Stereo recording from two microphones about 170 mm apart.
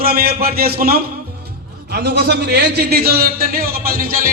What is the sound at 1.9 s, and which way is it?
A man's voice, 75° right (ahead or behind).